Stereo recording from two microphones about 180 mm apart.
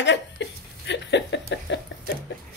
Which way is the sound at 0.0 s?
80° left.